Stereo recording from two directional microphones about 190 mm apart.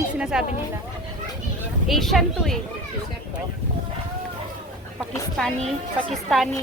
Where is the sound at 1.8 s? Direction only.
Centre (ahead or behind).